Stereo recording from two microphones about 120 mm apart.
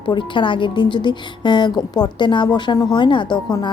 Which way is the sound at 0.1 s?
45° left (ahead or behind).